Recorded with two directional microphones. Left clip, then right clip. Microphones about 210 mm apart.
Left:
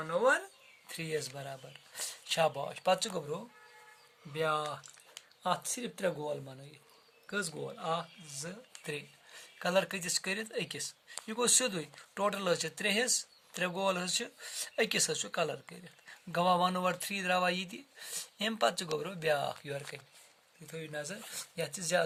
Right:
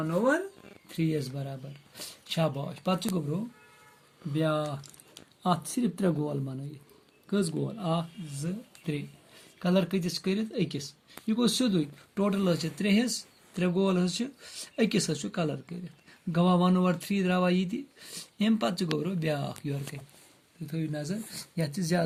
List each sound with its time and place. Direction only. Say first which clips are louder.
0.9 s speech: right 5 dB; 35° left (ahead or behind)
4.4 s speech: right 3 dB; 30° left (ahead or behind)
8.8 s speech: right 3 dB; 40° left (ahead or behind)
20.7 s speech: right 5 dB; 25° left (ahead or behind)